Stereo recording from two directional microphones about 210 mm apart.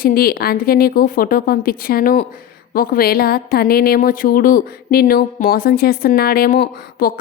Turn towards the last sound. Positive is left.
turn(degrees=45)  # may be behind; listen again after turning